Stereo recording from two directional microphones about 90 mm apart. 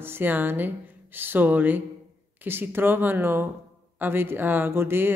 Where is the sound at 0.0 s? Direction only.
20° right (ahead or behind).